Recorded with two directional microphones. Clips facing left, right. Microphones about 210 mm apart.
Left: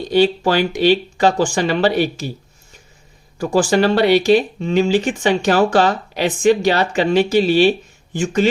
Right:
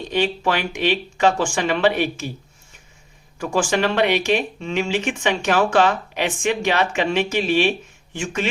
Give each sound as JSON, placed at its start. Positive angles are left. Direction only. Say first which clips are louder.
{"t": 0.1, "sound": "speech", "louder": "left 6 dB", "side_deg": 35}
{"t": 3.3, "sound": "speech", "louder": "left 5 dB", "side_deg": 35}